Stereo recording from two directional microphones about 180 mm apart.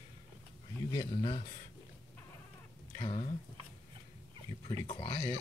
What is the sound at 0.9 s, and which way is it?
Speech, 25° left (ahead or behind).